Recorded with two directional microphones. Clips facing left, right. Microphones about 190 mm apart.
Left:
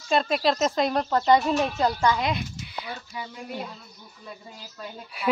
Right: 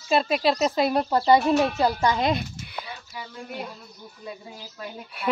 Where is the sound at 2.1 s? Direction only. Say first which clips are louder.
Right 3 dB; 35° right (ahead or behind).